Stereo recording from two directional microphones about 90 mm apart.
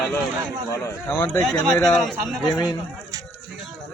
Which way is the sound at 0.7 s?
30° left (ahead or behind).